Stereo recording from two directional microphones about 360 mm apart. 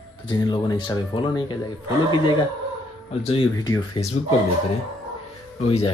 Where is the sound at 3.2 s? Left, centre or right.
Centre.